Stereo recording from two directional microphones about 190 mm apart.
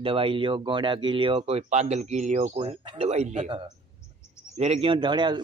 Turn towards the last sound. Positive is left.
turn(degrees=-25)  # may be behind; listen again after turning